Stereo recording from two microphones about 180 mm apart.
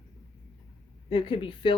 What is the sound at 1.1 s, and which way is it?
Speech, 30° left (ahead or behind).